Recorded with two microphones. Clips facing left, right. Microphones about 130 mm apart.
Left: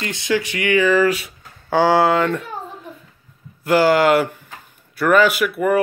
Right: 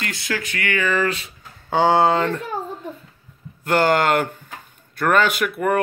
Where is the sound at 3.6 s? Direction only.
5° left (ahead or behind).